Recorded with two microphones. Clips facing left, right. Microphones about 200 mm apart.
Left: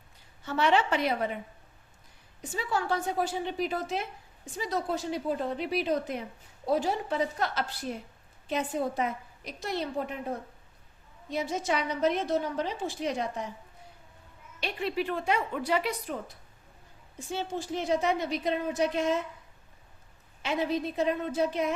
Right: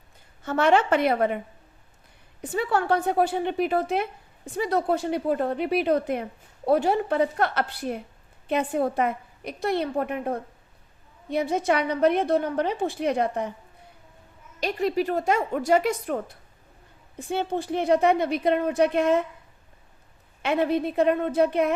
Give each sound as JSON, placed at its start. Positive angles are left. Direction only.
{"t": 0.4, "sound": "a woman's voice", "side_deg": -50}
{"t": 2.4, "sound": "a woman's voice", "side_deg": -60}
{"t": 14.6, "sound": "a woman's voice", "side_deg": -40}
{"t": 20.4, "sound": "a woman's voice", "side_deg": -60}